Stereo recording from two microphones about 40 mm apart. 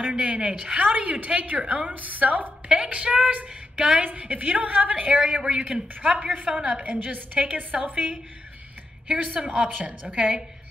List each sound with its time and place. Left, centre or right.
0.2 s a woman's voice: right
0.8 s a woman's voice: right
5.4 s a woman's voice: right